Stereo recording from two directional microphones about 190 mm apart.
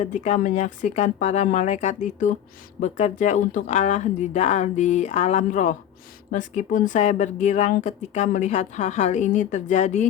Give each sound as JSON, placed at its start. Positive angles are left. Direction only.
{"t": 0.0, "sound": "speech", "side_deg": 40}